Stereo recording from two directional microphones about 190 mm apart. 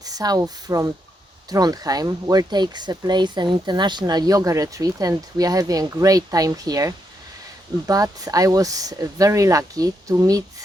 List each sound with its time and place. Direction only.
0.0 s speech: 20° right (ahead or behind)